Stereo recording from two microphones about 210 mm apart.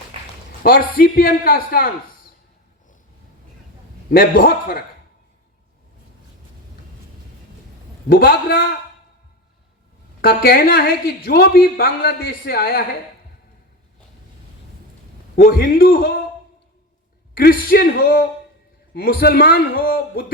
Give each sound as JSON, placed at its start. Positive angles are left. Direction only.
{"t": 0.6, "sound": "a woman's voice", "side_deg": 45}
{"t": 4.1, "sound": "a woman's voice", "side_deg": 45}
{"t": 8.1, "sound": "a woman's voice", "side_deg": 45}
{"t": 10.2, "sound": "a woman's voice", "side_deg": 45}
{"t": 15.4, "sound": "a woman's voice", "side_deg": 45}
{"t": 17.3, "sound": "a woman's voice", "side_deg": 45}